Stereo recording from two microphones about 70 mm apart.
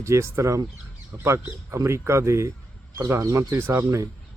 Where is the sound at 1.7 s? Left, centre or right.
Right.